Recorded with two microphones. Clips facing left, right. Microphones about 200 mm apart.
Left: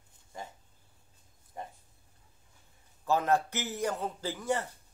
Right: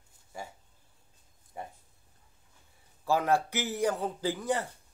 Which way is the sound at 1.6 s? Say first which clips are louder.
Right 1 dB; 10° right (ahead or behind).